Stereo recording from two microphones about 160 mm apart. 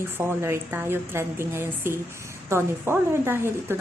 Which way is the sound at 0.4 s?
15° right (ahead or behind).